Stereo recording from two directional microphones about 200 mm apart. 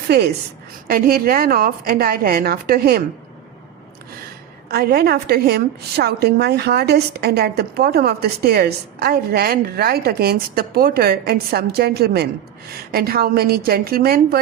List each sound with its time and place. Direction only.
0.9 s a woman's voice: 45° right (ahead or behind)
4.7 s a woman's voice: 50° right (ahead or behind)